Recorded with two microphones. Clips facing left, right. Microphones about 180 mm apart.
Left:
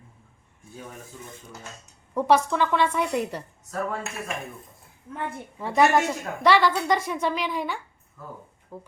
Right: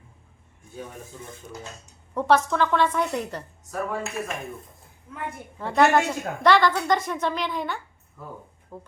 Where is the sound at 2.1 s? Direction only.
10° left (ahead or behind).